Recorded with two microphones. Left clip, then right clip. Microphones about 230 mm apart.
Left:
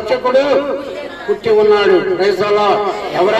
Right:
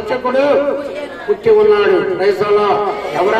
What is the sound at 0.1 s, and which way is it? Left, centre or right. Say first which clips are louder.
A man's voice: left 1 dB; left.